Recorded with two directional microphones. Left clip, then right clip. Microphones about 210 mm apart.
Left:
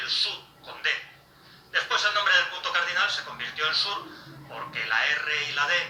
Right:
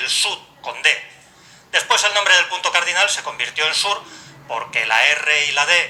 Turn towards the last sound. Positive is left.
turn(degrees=-30)  # may be behind; listen again after turning